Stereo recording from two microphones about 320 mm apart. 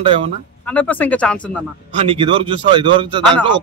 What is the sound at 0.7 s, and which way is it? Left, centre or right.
Speech, centre.